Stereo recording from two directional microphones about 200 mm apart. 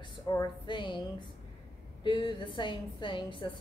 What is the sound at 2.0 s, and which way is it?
A woman's voice, 25° left (ahead or behind).